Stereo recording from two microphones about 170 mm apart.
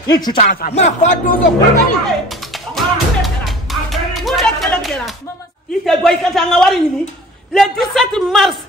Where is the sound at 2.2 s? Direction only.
Centre (ahead or behind).